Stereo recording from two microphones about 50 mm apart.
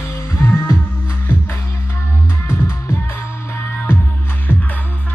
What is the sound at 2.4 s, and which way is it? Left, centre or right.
Music, left.